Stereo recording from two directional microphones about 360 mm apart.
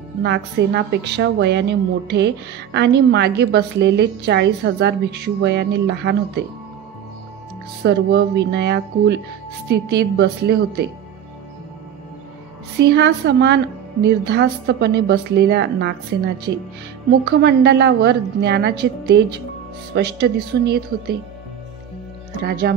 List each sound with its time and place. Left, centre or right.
0.2 s a woman's voice: right
7.8 s a woman's voice: right
12.9 s a woman's voice: right
17.4 s a woman's voice: right
22.4 s a woman's voice: right